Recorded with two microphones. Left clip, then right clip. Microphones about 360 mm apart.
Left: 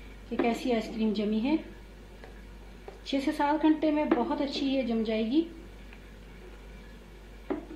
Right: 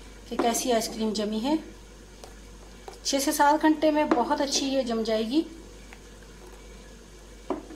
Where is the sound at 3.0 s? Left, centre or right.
Right.